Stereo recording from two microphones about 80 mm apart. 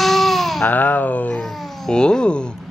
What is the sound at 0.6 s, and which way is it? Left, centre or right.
Speech, left.